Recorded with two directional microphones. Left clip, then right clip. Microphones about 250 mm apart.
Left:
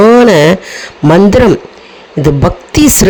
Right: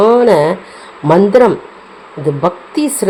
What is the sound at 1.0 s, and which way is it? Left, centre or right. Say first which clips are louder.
A woman's voice: left 2 dB; left.